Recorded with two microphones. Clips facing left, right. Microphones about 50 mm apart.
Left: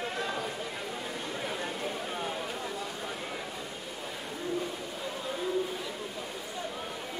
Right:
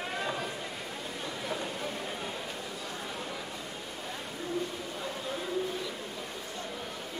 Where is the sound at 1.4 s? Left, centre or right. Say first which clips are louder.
Even; centre.